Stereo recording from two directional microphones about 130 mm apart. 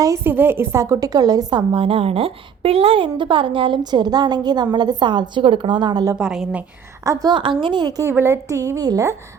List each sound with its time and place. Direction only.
0.0 s a woman's voice: 20° right (ahead or behind); by 6.1 s 35° right (ahead or behind)
6.1 s a woman's voice: 5° right (ahead or behind)
7.0 s a woman's voice: 25° right (ahead or behind)
8.0 s a woman's voice: 20° right (ahead or behind)